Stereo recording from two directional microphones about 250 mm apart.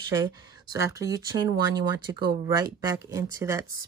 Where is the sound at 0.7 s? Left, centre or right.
Centre.